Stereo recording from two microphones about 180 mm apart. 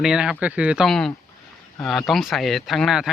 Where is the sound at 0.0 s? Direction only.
5° right (ahead or behind).